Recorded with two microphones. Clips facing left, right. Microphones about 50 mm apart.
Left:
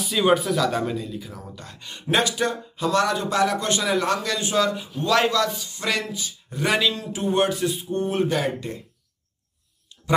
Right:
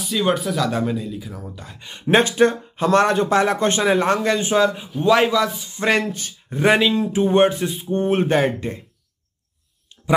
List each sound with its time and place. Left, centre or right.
0.0 s speech: centre
2.0 s speech: right; by 5.6 s centre
5.6 s speech: right
6.5 s a man's voice: right